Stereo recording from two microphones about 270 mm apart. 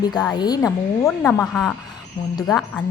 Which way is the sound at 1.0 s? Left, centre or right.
Centre.